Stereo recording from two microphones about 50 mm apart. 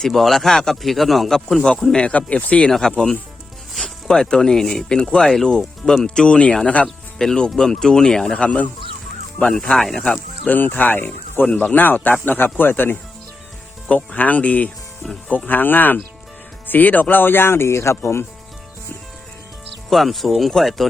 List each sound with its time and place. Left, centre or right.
0.1 s speech: centre
1.9 s speech: left
3.8 s speech: centre; by 6.9 s left
7.2 s speech: centre
8.4 s speech: left
9.7 s speech: centre
10.0 s speech: centre
10.5 s speech: left
14.2 s speech: left
15.4 s speech: left
19.9 s speech: centre